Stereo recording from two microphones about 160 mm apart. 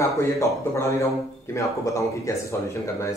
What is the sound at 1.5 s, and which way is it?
Speech, 20° left (ahead or behind).